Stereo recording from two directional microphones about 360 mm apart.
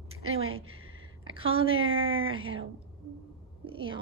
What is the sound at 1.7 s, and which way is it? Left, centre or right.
Speech, right.